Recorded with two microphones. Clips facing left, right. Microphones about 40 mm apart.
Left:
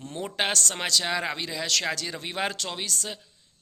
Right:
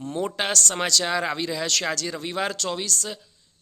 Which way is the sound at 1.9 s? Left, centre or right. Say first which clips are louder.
Right 4 dB; centre.